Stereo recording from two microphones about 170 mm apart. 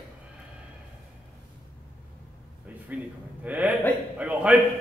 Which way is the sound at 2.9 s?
10° right (ahead or behind).